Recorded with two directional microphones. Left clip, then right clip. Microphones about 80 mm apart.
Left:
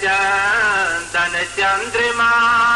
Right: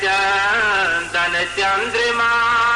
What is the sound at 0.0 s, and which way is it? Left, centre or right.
Music, right.